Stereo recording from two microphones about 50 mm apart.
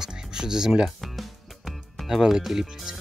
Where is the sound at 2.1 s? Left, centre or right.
Centre.